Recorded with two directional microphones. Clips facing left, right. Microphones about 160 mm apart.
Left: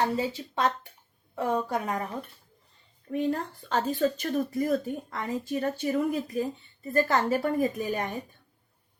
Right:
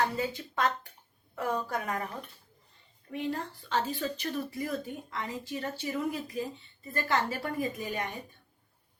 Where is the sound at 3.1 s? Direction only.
45° left (ahead or behind).